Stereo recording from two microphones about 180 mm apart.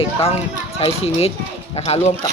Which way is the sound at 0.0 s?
35° left (ahead or behind).